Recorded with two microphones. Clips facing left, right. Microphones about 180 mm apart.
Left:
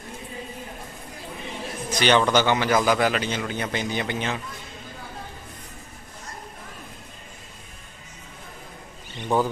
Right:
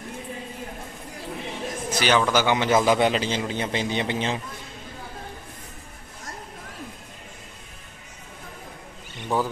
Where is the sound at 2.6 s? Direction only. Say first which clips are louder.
Right 1 dB; 25° right (ahead or behind).